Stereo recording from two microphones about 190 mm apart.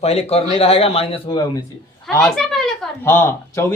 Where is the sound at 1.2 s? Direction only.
20° left (ahead or behind).